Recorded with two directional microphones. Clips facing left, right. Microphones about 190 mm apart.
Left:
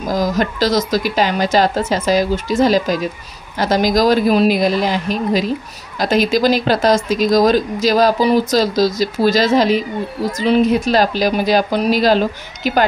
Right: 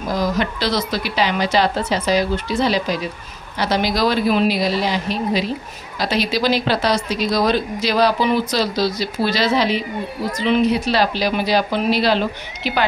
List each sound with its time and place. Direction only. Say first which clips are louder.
0.1 s speech: left 3 dB; 45° left (ahead or behind)